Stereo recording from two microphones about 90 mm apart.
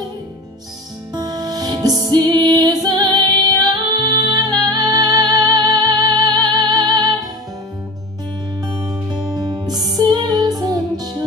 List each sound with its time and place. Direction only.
1.1 s music: 45° right (ahead or behind)
8.6 s music: 45° right (ahead or behind)